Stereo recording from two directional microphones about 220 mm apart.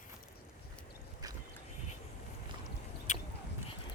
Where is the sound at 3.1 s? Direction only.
30° left (ahead or behind).